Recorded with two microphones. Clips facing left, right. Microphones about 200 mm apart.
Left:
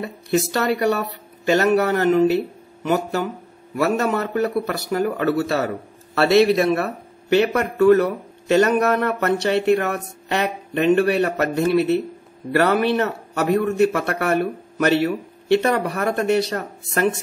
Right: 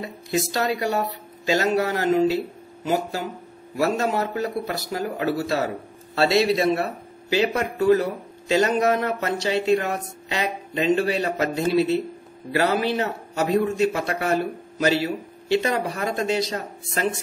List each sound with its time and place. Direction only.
0.0 s speech: 65° left (ahead or behind)